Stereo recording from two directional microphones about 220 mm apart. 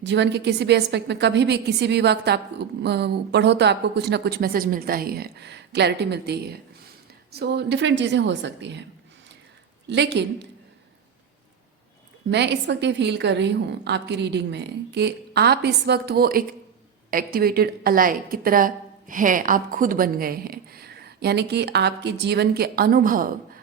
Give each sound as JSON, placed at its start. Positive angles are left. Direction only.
{"t": 0.0, "sound": "a woman's voice", "side_deg": -50}
{"t": 9.8, "sound": "speech", "side_deg": -50}
{"t": 12.3, "sound": "a woman's voice", "side_deg": -50}